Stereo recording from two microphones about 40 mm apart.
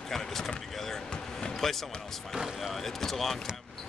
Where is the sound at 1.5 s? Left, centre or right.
Centre.